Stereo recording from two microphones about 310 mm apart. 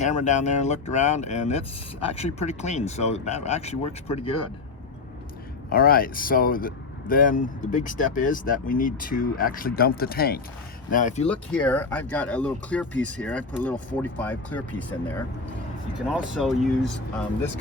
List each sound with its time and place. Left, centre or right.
0.0 s speech: left
5.7 s speech: left
11.5 s speech: centre